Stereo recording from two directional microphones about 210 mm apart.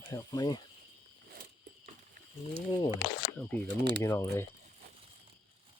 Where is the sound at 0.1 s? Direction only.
15° left (ahead or behind).